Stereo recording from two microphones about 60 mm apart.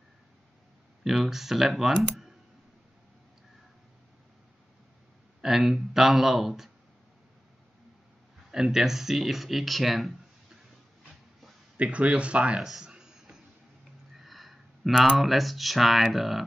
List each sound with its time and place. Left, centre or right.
1.0 s speech: centre
5.4 s speech: centre
8.5 s speech: centre
11.7 s speech: right
14.2 s a sound: centre
15.0 s speech: centre